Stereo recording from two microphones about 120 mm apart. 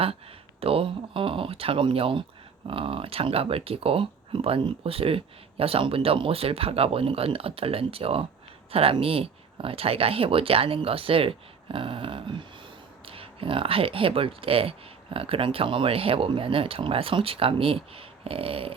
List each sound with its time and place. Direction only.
0.6 s speech: 50° right (ahead or behind)